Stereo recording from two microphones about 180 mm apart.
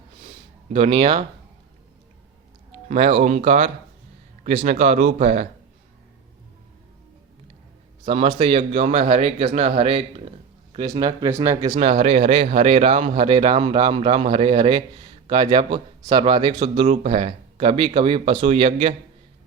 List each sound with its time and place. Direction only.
0.7 s speech: 30° right (ahead or behind)
2.9 s a man's voice: 35° right (ahead or behind)
8.0 s a man's voice: 30° right (ahead or behind)